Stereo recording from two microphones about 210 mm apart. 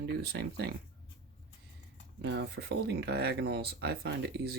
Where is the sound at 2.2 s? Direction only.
55° right (ahead or behind).